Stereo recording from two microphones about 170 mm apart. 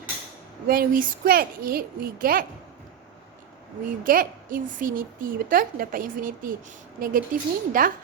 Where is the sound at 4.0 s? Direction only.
55° right (ahead or behind).